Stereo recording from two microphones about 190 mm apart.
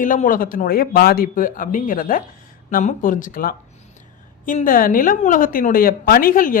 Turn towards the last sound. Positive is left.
turn(degrees=45)  # may be behind; listen again after turning